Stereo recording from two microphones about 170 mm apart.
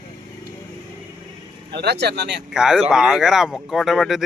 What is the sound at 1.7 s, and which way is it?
Speech, 80° right.